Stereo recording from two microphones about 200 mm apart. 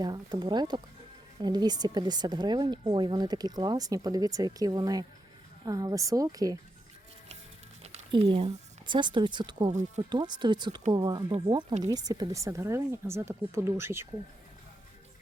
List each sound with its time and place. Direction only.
0.0 s speech: 20° right (ahead or behind)
7.8 s speech: 30° right (ahead or behind); by 14.1 s 10° right (ahead or behind)